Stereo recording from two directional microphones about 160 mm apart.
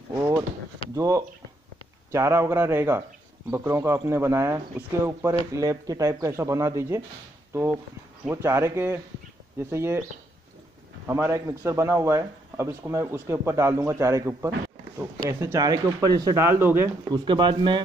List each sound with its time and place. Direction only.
0.1 s a sound: 15° right (ahead or behind)
0.9 s a man's voice: 20° right (ahead or behind)
8.3 s a man's voice: 15° right (ahead or behind)
11.1 s a man's voice: 15° right (ahead or behind)
17.1 s speech: 30° right (ahead or behind)